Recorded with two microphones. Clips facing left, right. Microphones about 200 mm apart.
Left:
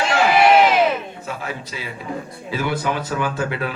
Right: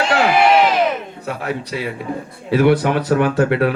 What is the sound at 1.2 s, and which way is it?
A man's voice, 65° right (ahead or behind).